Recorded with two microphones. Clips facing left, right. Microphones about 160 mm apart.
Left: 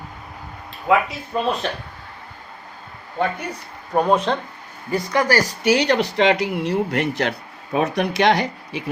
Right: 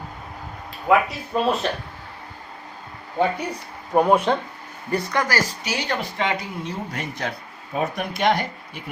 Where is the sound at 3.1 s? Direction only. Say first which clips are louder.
Right 1 dB; 10° right (ahead or behind).